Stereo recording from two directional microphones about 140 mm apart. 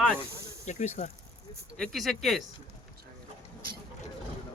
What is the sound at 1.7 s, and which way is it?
Speech, centre (ahead or behind).